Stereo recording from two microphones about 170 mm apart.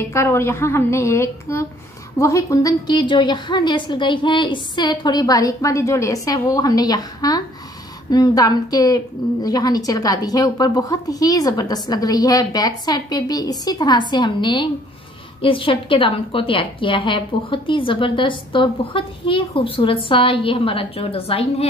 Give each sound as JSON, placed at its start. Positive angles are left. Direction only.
{"t": 0.1, "sound": "a woman's voice", "side_deg": 15}